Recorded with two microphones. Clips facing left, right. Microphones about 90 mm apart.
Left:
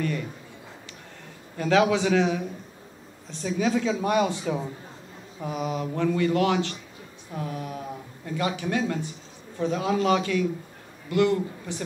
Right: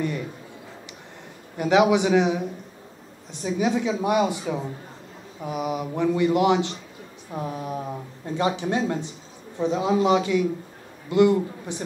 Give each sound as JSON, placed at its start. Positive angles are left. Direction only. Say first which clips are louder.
{"t": 1.6, "sound": "speech", "louder": "right 3 dB", "side_deg": -20}
{"t": 5.4, "sound": "speech", "louder": "right 2 dB", "side_deg": -15}